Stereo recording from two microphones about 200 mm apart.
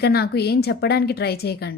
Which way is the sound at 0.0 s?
50° left (ahead or behind).